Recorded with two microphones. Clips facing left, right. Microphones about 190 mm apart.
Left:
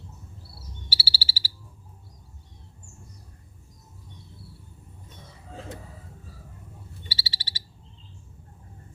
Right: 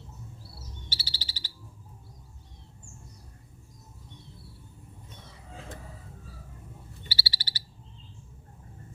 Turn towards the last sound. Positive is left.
turn(degrees=20)  # may be behind; listen again after turning